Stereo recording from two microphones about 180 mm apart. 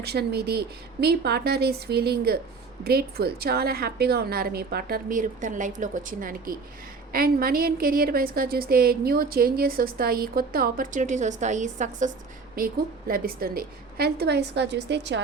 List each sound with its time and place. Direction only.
0.0 s a woman's voice: 65° right (ahead or behind); by 12.1 s 45° right (ahead or behind)
12.5 s a woman's voice: 55° right (ahead or behind); by 15.2 s 75° right (ahead or behind)